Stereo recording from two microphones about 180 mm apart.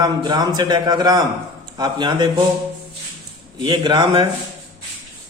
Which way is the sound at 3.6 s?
25° right (ahead or behind).